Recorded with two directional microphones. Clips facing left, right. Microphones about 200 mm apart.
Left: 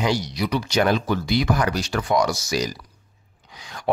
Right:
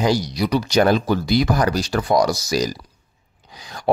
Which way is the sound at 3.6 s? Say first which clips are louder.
Right 3 dB; 35° right (ahead or behind).